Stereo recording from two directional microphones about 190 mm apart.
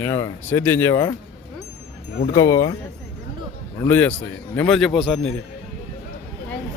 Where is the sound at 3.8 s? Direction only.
10° left (ahead or behind).